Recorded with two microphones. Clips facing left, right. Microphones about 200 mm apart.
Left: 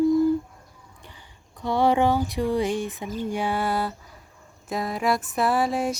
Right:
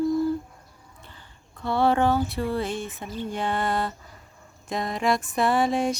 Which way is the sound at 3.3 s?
10° left (ahead or behind).